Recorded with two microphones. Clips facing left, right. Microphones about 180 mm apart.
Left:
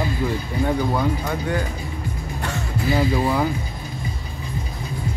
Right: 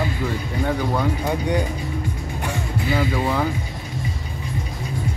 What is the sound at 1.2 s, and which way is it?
Speech, 15° right (ahead or behind).